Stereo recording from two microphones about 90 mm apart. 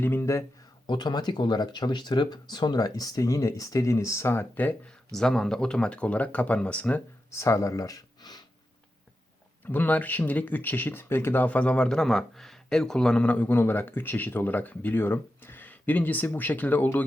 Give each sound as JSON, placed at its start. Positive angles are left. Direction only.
{"t": 0.0, "sound": "speech", "side_deg": 30}
{"t": 0.9, "sound": "speech", "side_deg": 55}
{"t": 5.1, "sound": "speech", "side_deg": 5}
{"t": 7.3, "sound": "a sound", "side_deg": 35}
{"t": 9.6, "sound": "speech", "side_deg": 20}